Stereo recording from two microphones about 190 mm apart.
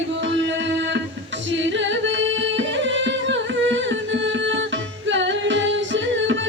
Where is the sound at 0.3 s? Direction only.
70° right (ahead or behind).